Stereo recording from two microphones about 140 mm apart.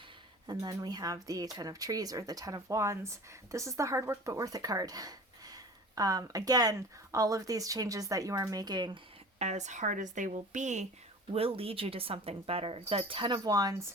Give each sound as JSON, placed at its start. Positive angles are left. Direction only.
{"t": 0.4, "sound": "speech", "side_deg": -30}
{"t": 9.4, "sound": "a woman's voice", "side_deg": -55}
{"t": 11.3, "sound": "speech", "side_deg": -45}